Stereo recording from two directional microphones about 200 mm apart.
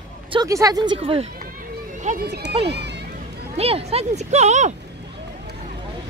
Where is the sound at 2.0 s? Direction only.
45° right (ahead or behind).